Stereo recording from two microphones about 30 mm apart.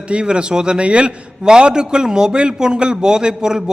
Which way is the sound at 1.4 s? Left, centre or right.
Right.